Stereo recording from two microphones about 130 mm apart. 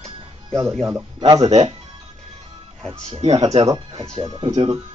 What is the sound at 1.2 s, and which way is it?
Speech, 35° right (ahead or behind).